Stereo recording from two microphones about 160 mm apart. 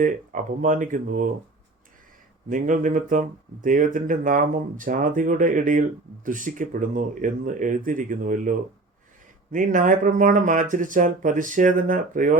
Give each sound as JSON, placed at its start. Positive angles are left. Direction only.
{"t": 0.0, "sound": "speech", "side_deg": -55}
{"t": 2.5, "sound": "speech", "side_deg": -55}